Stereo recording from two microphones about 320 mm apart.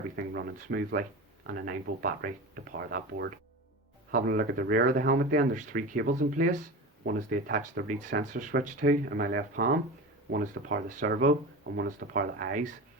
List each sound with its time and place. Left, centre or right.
0.2 s speech: right